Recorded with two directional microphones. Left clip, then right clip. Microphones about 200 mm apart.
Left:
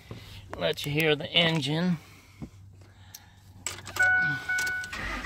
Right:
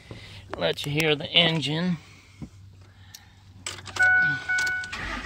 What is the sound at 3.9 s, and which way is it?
Vehicle, centre (ahead or behind).